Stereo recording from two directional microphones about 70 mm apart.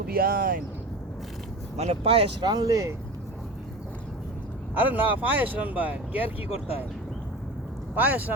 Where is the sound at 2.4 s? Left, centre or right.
Right.